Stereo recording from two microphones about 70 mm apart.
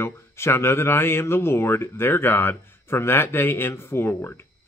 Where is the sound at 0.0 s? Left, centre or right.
Left.